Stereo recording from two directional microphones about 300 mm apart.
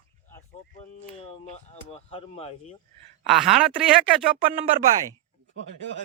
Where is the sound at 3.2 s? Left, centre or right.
Centre.